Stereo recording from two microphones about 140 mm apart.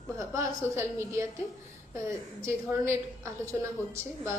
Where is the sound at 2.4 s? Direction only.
20° right (ahead or behind).